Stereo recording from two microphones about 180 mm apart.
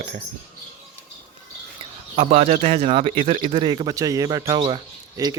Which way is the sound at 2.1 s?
40° right (ahead or behind).